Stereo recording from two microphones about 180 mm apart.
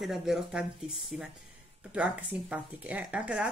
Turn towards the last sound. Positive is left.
turn(degrees=-5)  # may be behind; listen again after turning